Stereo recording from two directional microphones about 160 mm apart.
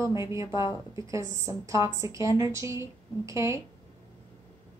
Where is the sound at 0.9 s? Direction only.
20° right (ahead or behind).